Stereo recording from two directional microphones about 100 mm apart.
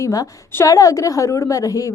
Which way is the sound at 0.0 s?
35° left (ahead or behind).